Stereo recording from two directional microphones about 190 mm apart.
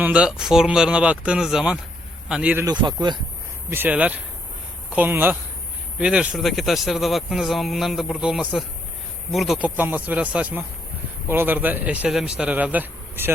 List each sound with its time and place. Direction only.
0.0 s speech: 5° right (ahead or behind)
2.6 s speech: 20° right (ahead or behind)
3.7 s speech: 10° right (ahead or behind)